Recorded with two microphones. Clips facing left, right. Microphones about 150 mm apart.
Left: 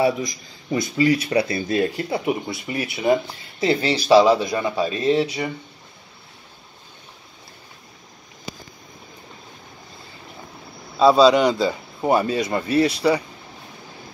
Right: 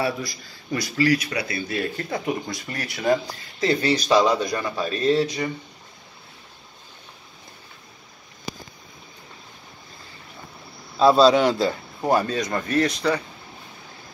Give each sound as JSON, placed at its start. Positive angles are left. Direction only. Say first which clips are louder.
{"t": 0.0, "sound": "speech", "louder": "left 6 dB", "side_deg": 20}
{"t": 2.0, "sound": "speech", "louder": "left 3 dB", "side_deg": 10}
{"t": 3.6, "sound": "speech", "louder": "left 1 dB", "side_deg": 25}
{"t": 11.0, "sound": "speech", "louder": "left 2 dB", "side_deg": 0}